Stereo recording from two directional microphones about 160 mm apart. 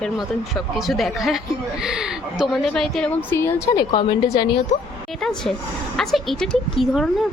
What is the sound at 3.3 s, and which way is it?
A woman's voice, 15° left (ahead or behind).